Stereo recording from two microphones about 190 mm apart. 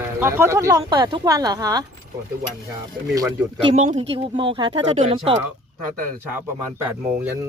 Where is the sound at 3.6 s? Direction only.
35° right (ahead or behind).